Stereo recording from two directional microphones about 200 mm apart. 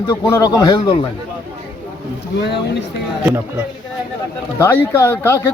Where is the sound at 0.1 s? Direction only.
15° left (ahead or behind).